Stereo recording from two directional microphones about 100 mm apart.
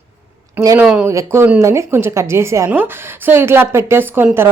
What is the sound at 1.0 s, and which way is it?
Speech, 25° right (ahead or behind).